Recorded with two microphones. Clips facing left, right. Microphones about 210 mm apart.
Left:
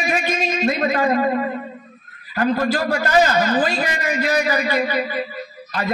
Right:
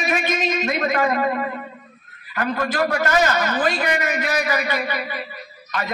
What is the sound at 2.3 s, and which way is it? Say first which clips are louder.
A man's voice: left 4 dB; 35° left (ahead or behind).